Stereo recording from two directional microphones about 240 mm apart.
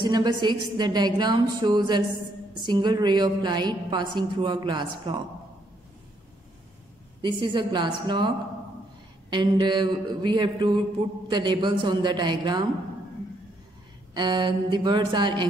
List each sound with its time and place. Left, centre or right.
0.0 s a woman's voice: centre
7.2 s a woman's voice: centre
9.3 s a woman's voice: centre
14.1 s a woman's voice: centre